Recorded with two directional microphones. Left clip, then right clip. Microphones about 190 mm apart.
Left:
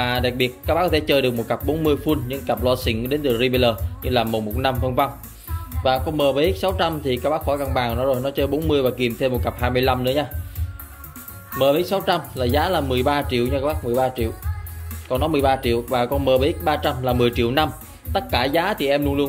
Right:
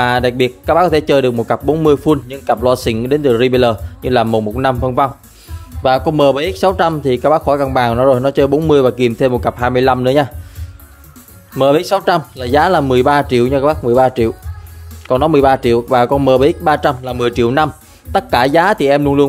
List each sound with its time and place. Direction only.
0.0 s speech: 35° right (ahead or behind)
5.8 s speech: 50° right (ahead or behind)
11.5 s speech: 45° right (ahead or behind)